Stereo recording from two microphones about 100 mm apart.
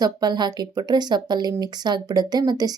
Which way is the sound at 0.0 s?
45° right (ahead or behind).